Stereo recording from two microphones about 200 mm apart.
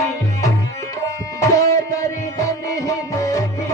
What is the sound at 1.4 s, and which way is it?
Music, 15° left (ahead or behind).